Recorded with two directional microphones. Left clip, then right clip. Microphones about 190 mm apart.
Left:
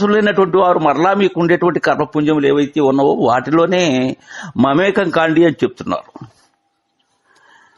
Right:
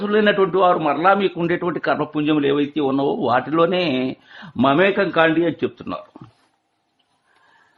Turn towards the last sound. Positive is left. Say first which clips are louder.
# left 7 dB
turn(degrees=40)  # may be behind; listen again after turning